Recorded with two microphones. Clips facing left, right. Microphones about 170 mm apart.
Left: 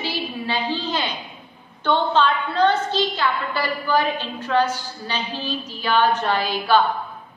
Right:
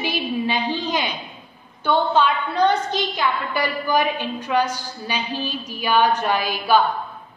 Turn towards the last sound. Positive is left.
turn(degrees=-15)  # may be behind; listen again after turning